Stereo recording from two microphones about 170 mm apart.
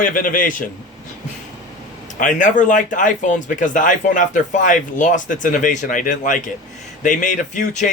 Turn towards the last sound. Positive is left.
turn(degrees=45)  # may be behind; listen again after turning